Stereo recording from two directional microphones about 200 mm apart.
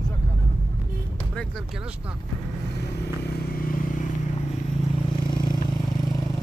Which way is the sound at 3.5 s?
45° left (ahead or behind).